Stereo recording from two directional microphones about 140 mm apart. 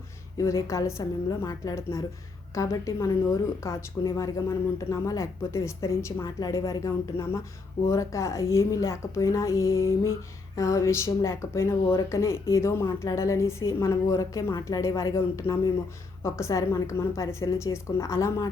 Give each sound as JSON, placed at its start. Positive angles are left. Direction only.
{"t": 0.3, "sound": "speech", "side_deg": 20}